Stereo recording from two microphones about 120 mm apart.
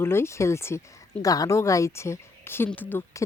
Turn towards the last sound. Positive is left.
turn(degrees=20)  # may be behind; listen again after turning